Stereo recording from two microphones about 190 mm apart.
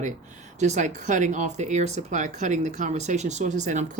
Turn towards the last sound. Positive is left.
turn(degrees=-40)  # may be behind; listen again after turning